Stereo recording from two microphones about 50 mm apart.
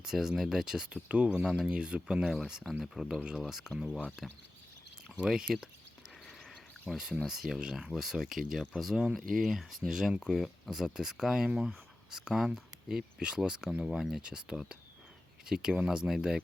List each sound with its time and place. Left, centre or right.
0.0 s speech: centre
0.9 s speech: right
2.2 s speech: centre
5.5 s speech: centre
6.8 s speech: centre
8.0 s speech: centre